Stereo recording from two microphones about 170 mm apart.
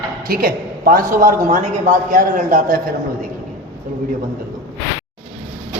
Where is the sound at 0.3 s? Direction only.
60° right (ahead or behind).